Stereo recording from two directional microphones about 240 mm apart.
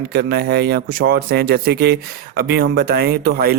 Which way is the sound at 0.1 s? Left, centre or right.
Right.